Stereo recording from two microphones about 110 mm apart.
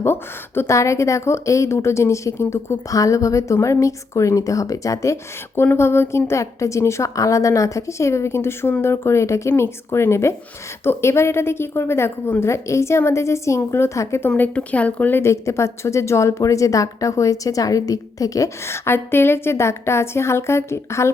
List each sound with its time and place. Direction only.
0.0 s speech: 20° left (ahead or behind)
14.3 s speech: 15° left (ahead or behind)